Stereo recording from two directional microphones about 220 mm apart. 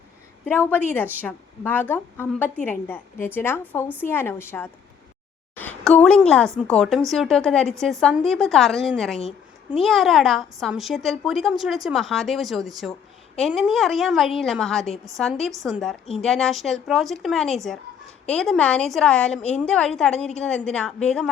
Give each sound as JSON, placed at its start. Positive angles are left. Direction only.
{"t": 0.4, "sound": "a woman's voice", "side_deg": 10}